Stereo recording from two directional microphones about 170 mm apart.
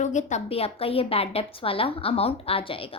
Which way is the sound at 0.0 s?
45° left (ahead or behind).